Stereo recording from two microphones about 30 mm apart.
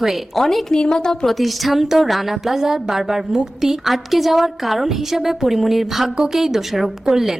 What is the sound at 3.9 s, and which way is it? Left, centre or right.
A woman's voice, centre.